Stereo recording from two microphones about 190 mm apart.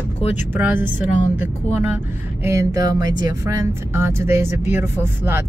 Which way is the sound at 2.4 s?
15° right (ahead or behind).